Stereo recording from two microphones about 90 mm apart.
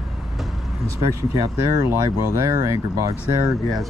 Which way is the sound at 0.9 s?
40° right (ahead or behind).